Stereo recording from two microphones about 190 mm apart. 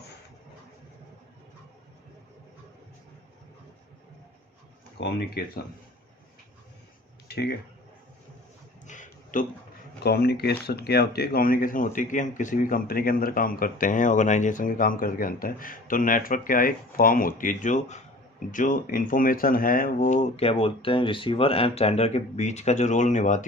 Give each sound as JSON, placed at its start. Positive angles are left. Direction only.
{"t": 4.9, "sound": "speech", "side_deg": 60}
{"t": 7.3, "sound": "speech", "side_deg": 60}
{"t": 8.9, "sound": "a sound", "side_deg": 45}
{"t": 10.0, "sound": "speech", "side_deg": 55}